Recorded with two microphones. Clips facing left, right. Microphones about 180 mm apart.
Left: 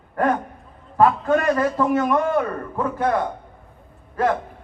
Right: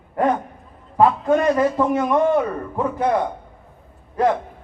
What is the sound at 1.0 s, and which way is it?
A man's voice, 15° right (ahead or behind).